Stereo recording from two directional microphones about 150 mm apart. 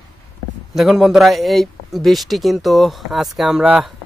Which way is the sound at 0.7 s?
Centre (ahead or behind).